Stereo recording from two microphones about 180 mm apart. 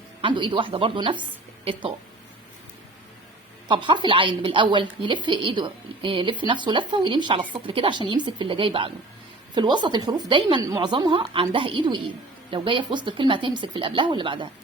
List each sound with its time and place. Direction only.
0.2 s a woman's voice: 25° right (ahead or behind)
3.7 s a woman's voice: 25° right (ahead or behind)